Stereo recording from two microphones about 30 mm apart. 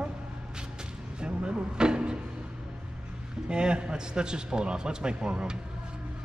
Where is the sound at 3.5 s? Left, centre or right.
Right.